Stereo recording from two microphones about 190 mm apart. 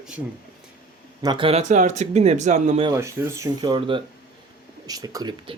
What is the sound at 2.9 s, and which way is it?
Speech, 15° right (ahead or behind).